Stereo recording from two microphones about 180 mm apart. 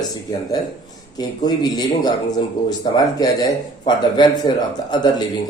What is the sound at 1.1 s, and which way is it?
Speech, 20° left (ahead or behind).